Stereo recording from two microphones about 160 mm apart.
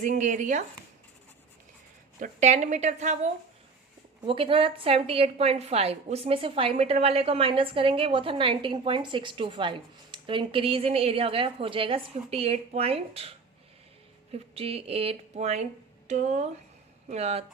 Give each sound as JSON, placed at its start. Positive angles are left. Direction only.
{"t": 0.0, "sound": "a woman's voice", "side_deg": -50}
{"t": 2.2, "sound": "a woman's voice", "side_deg": -45}
{"t": 4.2, "sound": "a woman's voice", "side_deg": -35}
{"t": 14.5, "sound": "a woman's voice", "side_deg": -40}